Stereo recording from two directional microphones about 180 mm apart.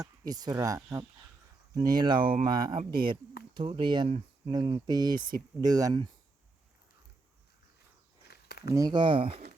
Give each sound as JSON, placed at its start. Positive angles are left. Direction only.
{"t": 0.0, "sound": "speech", "side_deg": -20}
{"t": 8.3, "sound": "a sound", "side_deg": 65}
{"t": 8.7, "sound": "speech", "side_deg": -25}